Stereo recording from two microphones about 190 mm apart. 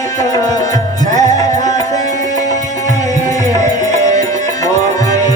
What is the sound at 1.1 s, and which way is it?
Music, 40° right (ahead or behind).